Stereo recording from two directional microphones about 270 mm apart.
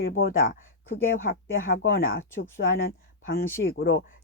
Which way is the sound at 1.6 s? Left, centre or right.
Left.